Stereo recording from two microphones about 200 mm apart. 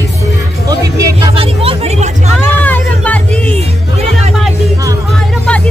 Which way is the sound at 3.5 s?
30° right (ahead or behind).